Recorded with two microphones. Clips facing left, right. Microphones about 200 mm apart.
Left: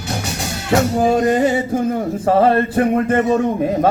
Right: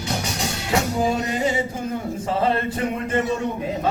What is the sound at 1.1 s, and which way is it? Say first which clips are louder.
Music: left 8 dB; 50° left (ahead or behind).